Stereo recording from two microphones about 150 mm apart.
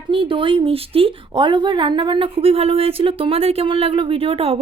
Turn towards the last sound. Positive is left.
turn(degrees=-40)  # may be behind; listen again after turning